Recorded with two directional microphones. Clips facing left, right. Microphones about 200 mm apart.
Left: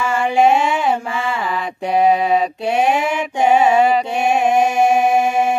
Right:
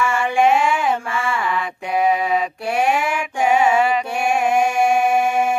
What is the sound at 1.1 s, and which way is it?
Mantra, 20° left (ahead or behind).